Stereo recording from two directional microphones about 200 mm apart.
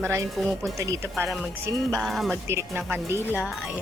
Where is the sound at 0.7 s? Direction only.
15° right (ahead or behind).